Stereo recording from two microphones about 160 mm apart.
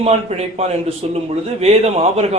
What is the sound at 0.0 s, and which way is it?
A man's voice, 40° right (ahead or behind).